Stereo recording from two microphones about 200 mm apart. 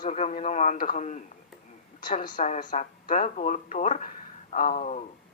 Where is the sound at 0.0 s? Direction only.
35° left (ahead or behind).